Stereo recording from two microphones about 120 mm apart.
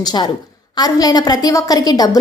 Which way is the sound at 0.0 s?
35° left (ahead or behind).